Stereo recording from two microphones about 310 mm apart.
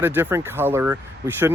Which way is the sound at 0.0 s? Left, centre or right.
Centre.